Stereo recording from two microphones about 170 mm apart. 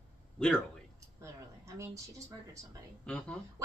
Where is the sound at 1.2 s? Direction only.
20° right (ahead or behind).